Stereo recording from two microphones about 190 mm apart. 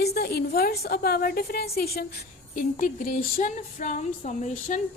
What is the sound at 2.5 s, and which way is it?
A woman's voice, 45° left (ahead or behind).